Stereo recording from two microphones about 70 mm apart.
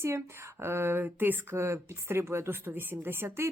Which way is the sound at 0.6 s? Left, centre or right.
Right.